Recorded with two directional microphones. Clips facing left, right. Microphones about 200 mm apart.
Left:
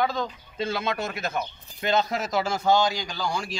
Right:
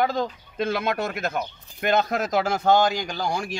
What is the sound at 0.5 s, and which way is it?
A man's voice, 55° right (ahead or behind).